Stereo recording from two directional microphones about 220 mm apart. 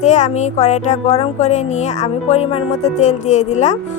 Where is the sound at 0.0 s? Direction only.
30° left (ahead or behind).